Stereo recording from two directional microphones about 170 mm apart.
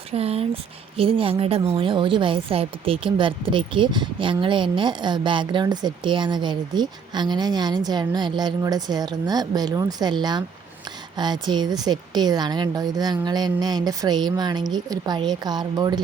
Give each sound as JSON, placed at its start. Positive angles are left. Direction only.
{"t": 0.1, "sound": "speech", "side_deg": -35}